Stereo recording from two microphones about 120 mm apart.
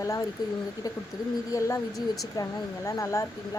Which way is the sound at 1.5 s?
25° left (ahead or behind).